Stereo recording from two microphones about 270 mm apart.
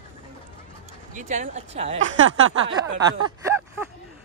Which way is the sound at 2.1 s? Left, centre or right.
Right.